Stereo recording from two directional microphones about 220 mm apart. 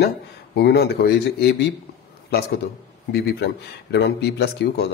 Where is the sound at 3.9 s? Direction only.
45° left (ahead or behind).